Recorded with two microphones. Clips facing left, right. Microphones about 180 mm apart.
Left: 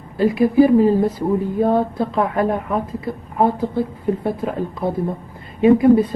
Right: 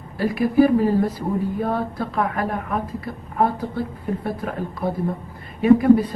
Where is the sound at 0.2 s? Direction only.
25° left (ahead or behind).